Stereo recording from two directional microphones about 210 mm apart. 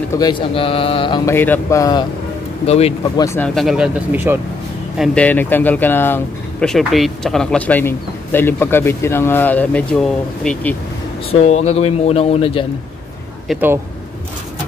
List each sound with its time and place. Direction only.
0.1 s speech: 20° left (ahead or behind)
2.6 s speech: 30° left (ahead or behind)
3.4 s speech: centre (ahead or behind)
4.9 s speech: centre (ahead or behind)
11.4 s speech: 30° left (ahead or behind)
13.5 s speech: 10° right (ahead or behind)